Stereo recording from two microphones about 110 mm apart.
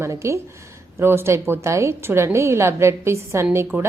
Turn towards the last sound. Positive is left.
turn(degrees=-25)  # may be behind; listen again after turning